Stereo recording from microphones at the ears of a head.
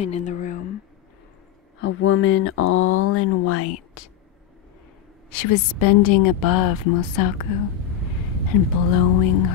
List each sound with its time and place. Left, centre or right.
0.0 s a sound: left
1.8 s a woman's voice: left
5.3 s a woman's voice: left